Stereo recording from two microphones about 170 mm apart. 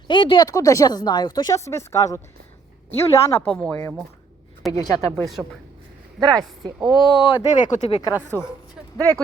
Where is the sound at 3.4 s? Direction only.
5° left (ahead or behind).